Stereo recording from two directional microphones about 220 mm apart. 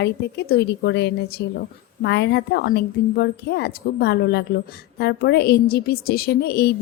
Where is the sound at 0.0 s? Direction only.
50° left (ahead or behind).